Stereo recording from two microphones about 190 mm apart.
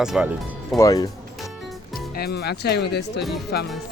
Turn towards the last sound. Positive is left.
turn(degrees=60)  # may be behind; listen again after turning